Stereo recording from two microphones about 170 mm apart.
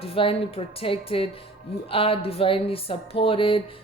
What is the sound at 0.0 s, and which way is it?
A woman's voice, 35° left (ahead or behind).